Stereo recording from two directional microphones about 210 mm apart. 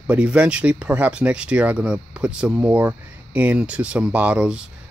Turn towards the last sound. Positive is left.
turn(degrees=-5)  # may be behind; listen again after turning